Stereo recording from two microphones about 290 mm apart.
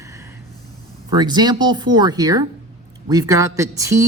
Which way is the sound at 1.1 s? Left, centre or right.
Centre.